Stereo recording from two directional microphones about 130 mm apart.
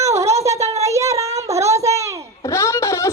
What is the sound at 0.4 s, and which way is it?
Child singing, 25° right (ahead or behind).